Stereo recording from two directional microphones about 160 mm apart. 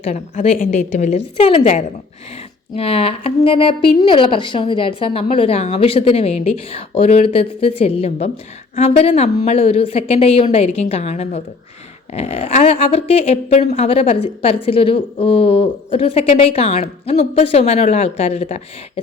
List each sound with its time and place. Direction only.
0.1 s a woman's voice: 50° left (ahead or behind)